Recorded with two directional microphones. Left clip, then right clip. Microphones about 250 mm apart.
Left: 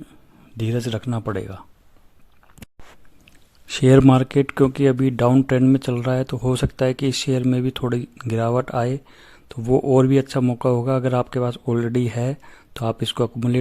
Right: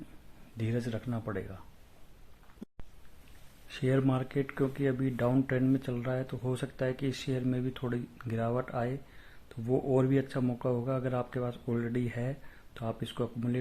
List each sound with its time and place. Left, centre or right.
0.5 s speech: left
3.7 s speech: left